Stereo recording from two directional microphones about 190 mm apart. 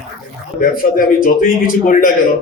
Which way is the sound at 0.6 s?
45° left (ahead or behind).